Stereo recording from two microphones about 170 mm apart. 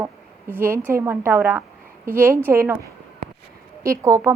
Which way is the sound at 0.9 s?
15° right (ahead or behind).